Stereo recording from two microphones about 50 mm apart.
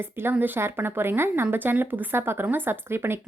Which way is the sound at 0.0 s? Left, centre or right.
Right.